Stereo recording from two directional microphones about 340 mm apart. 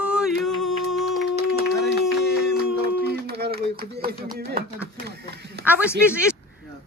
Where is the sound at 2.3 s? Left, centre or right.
Right.